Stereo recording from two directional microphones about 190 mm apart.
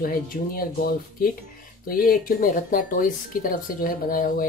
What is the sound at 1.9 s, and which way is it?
Speech, 50° left (ahead or behind).